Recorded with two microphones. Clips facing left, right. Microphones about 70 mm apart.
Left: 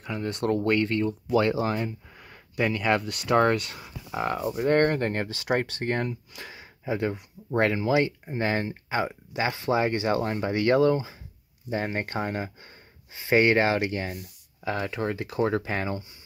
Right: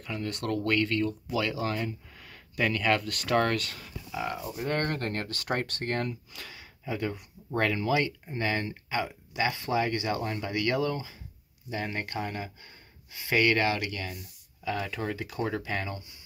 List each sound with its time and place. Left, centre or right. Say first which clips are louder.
0.0 s speech: left 5 dB; left
4.1 s speech: left 6 dB; left
4.9 s speech: left 5 dB; left
13.1 s speech: left 5 dB; left
15.4 s speech: left 6 dB; left